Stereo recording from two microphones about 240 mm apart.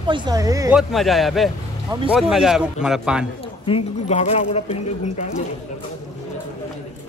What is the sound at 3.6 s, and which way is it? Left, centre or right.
Speech, left.